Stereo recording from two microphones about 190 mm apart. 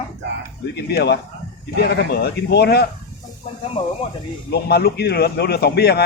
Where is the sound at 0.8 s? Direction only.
60° left (ahead or behind).